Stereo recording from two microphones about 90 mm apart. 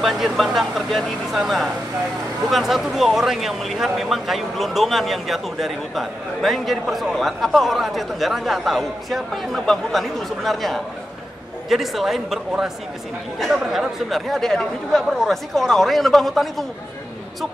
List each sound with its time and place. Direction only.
0.0 s speech: centre (ahead or behind)